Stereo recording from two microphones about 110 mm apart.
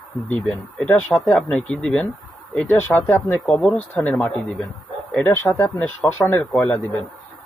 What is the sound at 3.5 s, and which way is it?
A man's voice, 5° left (ahead or behind).